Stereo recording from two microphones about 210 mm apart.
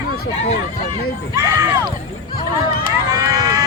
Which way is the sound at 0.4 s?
30° left (ahead or behind).